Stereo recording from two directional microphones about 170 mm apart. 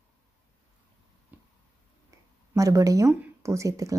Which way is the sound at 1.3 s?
10° right (ahead or behind).